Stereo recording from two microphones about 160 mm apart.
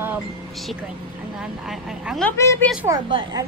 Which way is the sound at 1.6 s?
5° right (ahead or behind).